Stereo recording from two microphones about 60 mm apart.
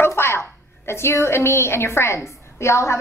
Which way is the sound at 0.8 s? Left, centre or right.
Left.